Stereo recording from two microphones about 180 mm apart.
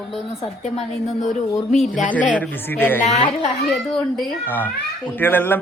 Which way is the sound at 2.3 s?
10° left (ahead or behind).